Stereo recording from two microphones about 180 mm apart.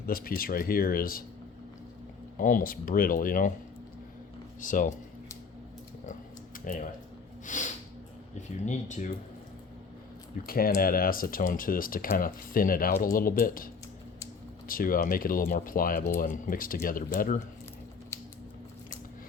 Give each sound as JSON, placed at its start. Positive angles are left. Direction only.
{"t": 0.0, "sound": "speech", "side_deg": 55}
{"t": 2.4, "sound": "speech", "side_deg": 50}
{"t": 4.6, "sound": "speech", "side_deg": 50}
{"t": 6.7, "sound": "speech", "side_deg": 45}
{"t": 7.4, "sound": "a sound", "side_deg": 45}
{"t": 8.6, "sound": "speech", "side_deg": 45}
{"t": 10.4, "sound": "speech", "side_deg": 55}
{"t": 14.7, "sound": "speech", "side_deg": 50}